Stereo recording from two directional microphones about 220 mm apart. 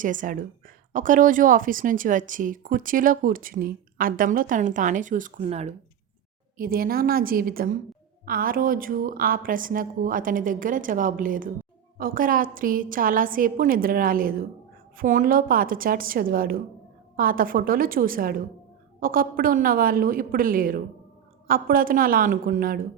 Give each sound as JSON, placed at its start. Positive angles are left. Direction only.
{"t": 0.0, "sound": "a woman's voice", "side_deg": -35}
{"t": 6.6, "sound": "a woman's voice", "side_deg": -40}